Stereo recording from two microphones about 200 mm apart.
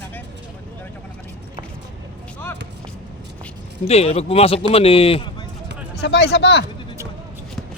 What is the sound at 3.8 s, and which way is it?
A man's voice, 30° left (ahead or behind).